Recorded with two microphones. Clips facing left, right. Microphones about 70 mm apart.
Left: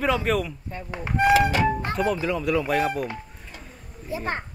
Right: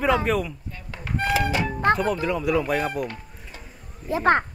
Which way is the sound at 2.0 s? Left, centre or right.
Centre.